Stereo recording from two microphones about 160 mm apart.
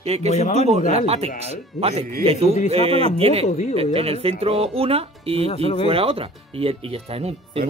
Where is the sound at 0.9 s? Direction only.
40° right (ahead or behind).